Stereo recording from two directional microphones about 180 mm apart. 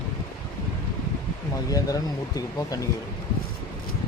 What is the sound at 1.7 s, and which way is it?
Speech, 20° left (ahead or behind).